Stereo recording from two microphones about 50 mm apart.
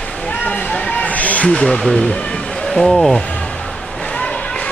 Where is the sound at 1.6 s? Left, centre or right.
Centre.